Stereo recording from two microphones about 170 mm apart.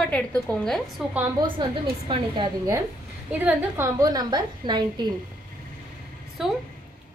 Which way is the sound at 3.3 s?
10° right (ahead or behind).